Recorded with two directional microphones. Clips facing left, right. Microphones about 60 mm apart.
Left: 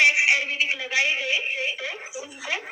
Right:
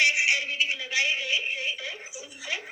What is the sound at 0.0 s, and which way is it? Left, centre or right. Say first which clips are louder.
Telephone: left 4 dB; left.